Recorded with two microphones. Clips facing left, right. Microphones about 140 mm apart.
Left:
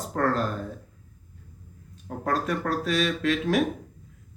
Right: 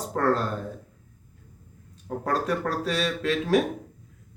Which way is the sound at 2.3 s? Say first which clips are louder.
Even; 35° right (ahead or behind).